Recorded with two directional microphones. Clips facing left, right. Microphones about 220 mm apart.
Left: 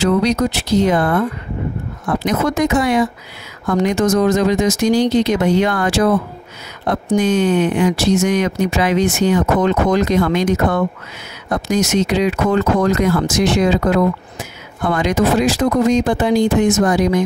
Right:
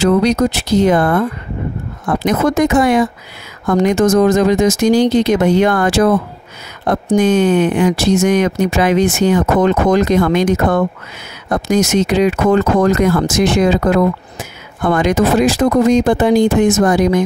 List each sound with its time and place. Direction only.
0.0 s speech: 50° right (ahead or behind)
2.2 s speech: 50° right (ahead or behind)
7.2 s speech: 50° right (ahead or behind)